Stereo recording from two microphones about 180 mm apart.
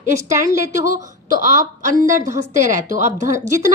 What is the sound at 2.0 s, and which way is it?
A woman's voice, 45° right (ahead or behind).